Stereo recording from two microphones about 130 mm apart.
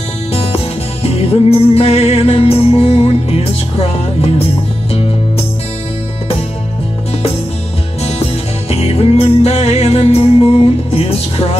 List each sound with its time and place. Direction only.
0.3 s music: 50° left (ahead or behind)
8.0 s music: 50° left (ahead or behind)